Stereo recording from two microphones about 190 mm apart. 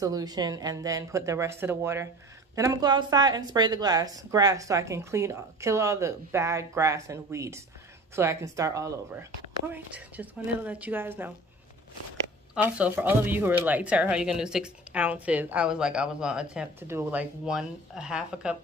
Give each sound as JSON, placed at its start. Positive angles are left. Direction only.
{"t": 0.0, "sound": "speech", "side_deg": -20}
{"t": 12.5, "sound": "speech", "side_deg": -5}